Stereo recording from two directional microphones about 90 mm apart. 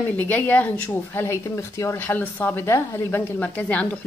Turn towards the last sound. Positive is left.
turn(degrees=15)  # may be behind; listen again after turning